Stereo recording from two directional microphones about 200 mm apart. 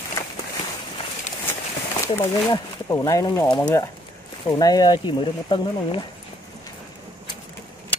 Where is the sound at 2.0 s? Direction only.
15° left (ahead or behind).